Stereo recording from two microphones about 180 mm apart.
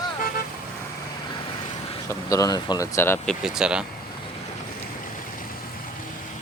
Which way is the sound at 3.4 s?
5° right (ahead or behind).